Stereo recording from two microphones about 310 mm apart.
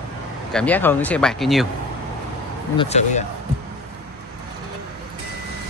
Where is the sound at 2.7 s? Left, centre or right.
Left.